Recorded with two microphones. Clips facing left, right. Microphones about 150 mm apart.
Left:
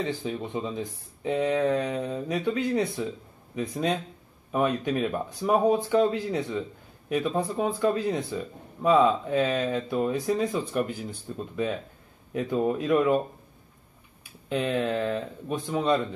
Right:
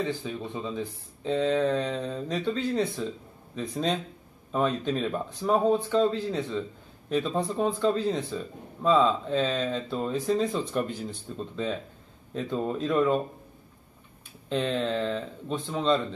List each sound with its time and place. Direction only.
0.0 s speech: 15° left (ahead or behind)
14.5 s speech: 10° left (ahead or behind)